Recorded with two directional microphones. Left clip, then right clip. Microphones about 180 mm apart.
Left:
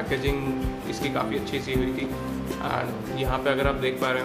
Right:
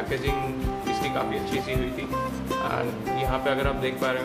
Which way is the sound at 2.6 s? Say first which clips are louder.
Left 2 dB; 15° left (ahead or behind).